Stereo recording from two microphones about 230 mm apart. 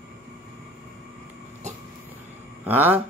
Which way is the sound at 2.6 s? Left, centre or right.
Centre.